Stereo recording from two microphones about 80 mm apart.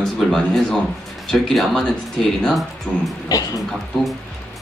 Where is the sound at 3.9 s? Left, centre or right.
Centre.